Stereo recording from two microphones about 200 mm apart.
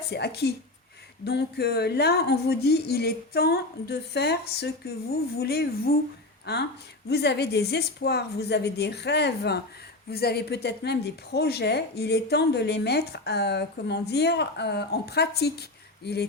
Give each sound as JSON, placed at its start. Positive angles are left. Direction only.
{"t": 0.1, "sound": "a woman's voice", "side_deg": 55}